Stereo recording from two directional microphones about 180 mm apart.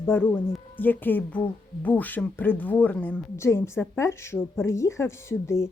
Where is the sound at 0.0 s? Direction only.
10° left (ahead or behind).